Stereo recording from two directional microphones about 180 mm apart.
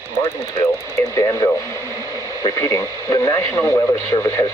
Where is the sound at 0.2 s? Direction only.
15° left (ahead or behind).